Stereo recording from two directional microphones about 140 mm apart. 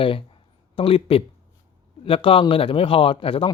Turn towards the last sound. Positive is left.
turn(degrees=40)  # may be behind; listen again after turning